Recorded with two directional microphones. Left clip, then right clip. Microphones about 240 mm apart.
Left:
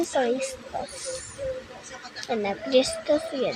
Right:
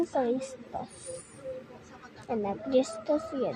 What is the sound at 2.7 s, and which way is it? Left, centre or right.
Speech, centre.